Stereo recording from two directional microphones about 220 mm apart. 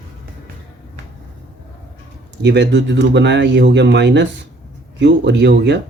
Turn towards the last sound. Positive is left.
turn(degrees=-50)  # may be behind; listen again after turning